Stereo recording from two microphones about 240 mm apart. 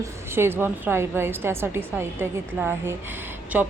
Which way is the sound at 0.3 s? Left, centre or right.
Centre.